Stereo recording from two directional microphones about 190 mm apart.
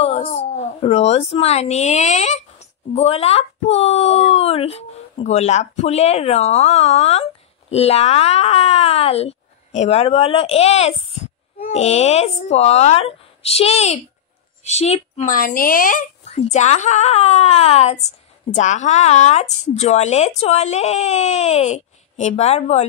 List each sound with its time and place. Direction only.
0.0 s speech: 30° left (ahead or behind)